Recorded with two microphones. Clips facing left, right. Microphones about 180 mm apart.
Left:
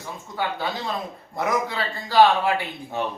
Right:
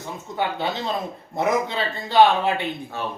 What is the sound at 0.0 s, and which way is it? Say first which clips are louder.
Speech: right 2 dB; 20° right (ahead or behind).